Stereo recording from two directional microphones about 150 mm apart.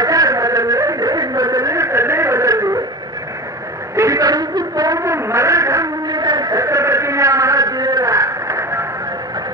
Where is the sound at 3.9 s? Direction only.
20° right (ahead or behind).